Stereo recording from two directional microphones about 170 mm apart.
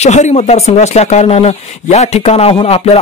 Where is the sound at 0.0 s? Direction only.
45° left (ahead or behind).